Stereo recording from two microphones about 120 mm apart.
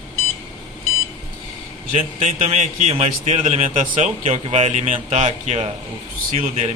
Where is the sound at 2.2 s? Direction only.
90° right.